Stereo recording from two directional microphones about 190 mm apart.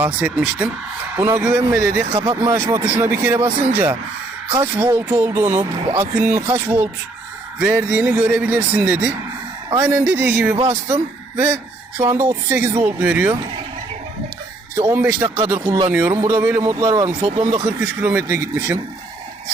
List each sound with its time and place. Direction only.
0.0 s a man's voice: 5° right (ahead or behind)
2.1 s a man's voice: 25° right (ahead or behind); by 10.6 s 10° right (ahead or behind)
10.6 s speech: 25° right (ahead or behind)
10.9 s a man's voice: 10° right (ahead or behind)
14.8 s a man's voice: 10° right (ahead or behind)
15.4 s speech: 25° right (ahead or behind)
15.9 s speech: 10° right (ahead or behind); by 17.6 s 30° right (ahead or behind)
17.7 s a man's voice: 10° right (ahead or behind)